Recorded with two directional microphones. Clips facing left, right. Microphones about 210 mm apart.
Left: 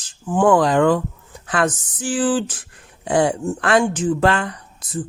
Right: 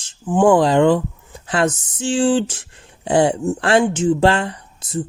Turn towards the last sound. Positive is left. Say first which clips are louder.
# right 3 dB
turn(degrees=-25)  # may be behind; listen again after turning